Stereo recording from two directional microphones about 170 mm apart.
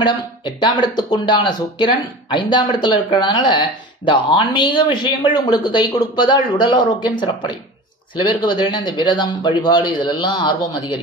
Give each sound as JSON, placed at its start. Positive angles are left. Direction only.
{"t": 0.0, "sound": "speech", "side_deg": 25}